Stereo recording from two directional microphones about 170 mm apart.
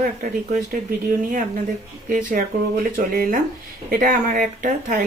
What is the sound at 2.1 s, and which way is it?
A woman's voice, 50° right (ahead or behind).